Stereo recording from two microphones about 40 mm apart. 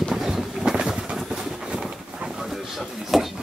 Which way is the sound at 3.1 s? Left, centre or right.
Centre.